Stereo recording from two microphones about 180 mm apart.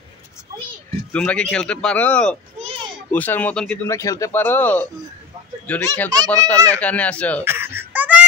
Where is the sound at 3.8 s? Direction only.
20° left (ahead or behind).